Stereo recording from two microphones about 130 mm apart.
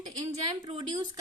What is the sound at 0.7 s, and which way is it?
Speech, 40° right (ahead or behind).